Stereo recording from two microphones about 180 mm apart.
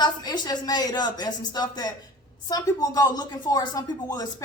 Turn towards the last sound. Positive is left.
turn(degrees=20)  # may be behind; listen again after turning